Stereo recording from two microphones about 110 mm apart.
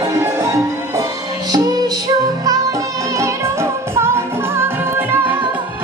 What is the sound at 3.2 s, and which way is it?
Music, 25° right (ahead or behind).